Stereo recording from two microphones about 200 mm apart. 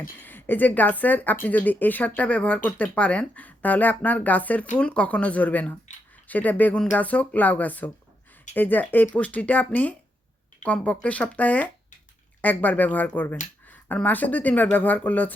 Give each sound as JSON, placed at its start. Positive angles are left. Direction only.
{"t": 0.2, "sound": "speech", "side_deg": 10}